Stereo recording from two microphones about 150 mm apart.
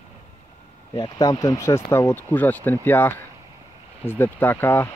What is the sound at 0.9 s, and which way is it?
Speech, 25° left (ahead or behind).